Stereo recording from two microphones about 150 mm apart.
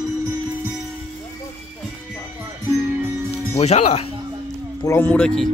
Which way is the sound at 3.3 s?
40° left (ahead or behind).